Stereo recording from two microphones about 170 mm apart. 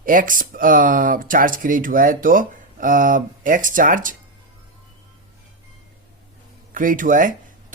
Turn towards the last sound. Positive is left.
turn(degrees=-50)  # may be behind; listen again after turning